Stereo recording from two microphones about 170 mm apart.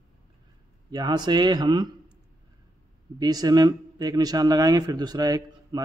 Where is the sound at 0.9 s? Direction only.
25° right (ahead or behind).